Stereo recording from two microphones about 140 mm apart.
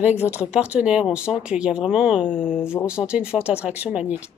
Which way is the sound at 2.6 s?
15° left (ahead or behind).